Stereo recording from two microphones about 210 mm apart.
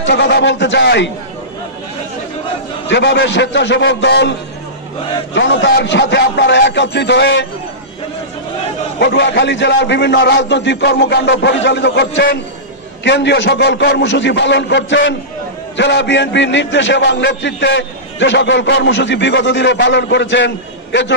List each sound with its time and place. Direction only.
0.0 s a man's voice: 55° left (ahead or behind)
2.9 s a man's voice: 55° left (ahead or behind)
9.0 s a man's voice: 55° left (ahead or behind)